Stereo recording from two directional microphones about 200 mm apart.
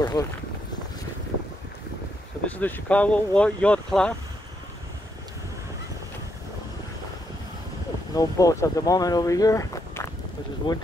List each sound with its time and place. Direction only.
0.0 s speech: 20° left (ahead or behind)
2.4 s speech: 10° left (ahead or behind)
8.1 s speech: 15° left (ahead or behind)